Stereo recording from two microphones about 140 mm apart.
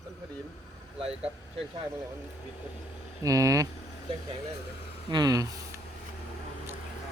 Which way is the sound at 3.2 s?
25° right (ahead or behind).